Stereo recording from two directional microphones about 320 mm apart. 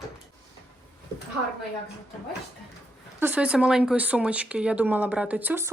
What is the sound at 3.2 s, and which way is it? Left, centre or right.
Speech, centre.